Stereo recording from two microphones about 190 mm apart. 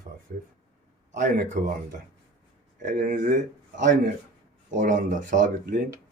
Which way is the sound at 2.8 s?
45° right (ahead or behind).